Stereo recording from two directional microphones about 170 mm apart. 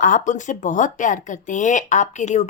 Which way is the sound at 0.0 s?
50° left (ahead or behind).